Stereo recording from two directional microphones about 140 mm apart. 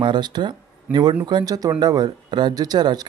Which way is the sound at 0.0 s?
30° right (ahead or behind).